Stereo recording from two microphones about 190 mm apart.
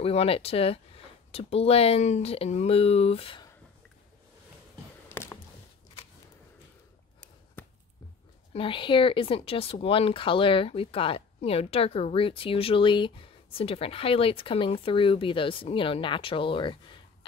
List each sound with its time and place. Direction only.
0.0 s speech: 30° left (ahead or behind)
5.1 s a sound: 15° left (ahead or behind)
8.5 s speech: 25° left (ahead or behind)